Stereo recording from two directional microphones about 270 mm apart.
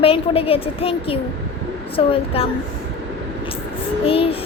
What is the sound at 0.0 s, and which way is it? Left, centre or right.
Speech, left.